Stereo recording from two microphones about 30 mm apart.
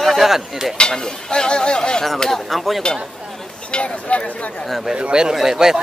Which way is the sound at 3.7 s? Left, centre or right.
Left.